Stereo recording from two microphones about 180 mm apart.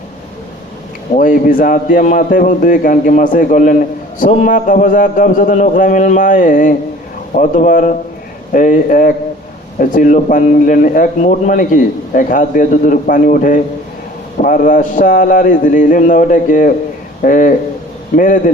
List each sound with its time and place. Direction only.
1.1 s a man's voice: 50° left (ahead or behind)